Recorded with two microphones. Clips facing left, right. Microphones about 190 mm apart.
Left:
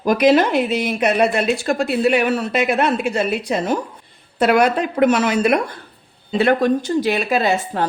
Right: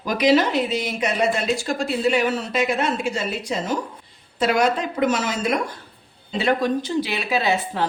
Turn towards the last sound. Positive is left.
turn(degrees=45)  # may be behind; listen again after turning